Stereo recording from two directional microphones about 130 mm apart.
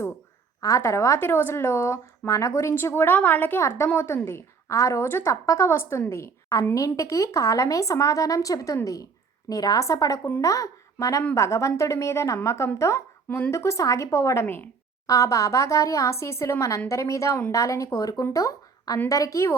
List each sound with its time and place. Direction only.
0.6 s speech: 25° left (ahead or behind)